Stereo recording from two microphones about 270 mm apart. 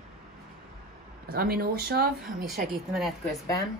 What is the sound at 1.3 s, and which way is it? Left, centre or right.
Speech, right.